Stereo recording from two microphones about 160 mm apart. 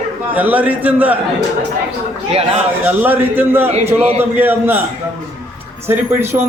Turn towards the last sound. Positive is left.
turn(degrees=-15)  # may be behind; listen again after turning